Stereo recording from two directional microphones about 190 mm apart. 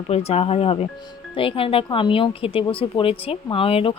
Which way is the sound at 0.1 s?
35° left (ahead or behind).